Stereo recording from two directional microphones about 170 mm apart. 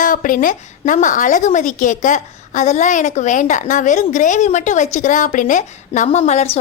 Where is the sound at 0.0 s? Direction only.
50° left (ahead or behind).